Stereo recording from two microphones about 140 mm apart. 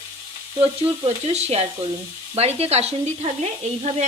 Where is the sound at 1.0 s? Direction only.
50° right (ahead or behind).